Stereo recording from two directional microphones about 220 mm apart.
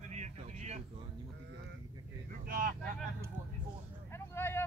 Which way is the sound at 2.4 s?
40° right (ahead or behind).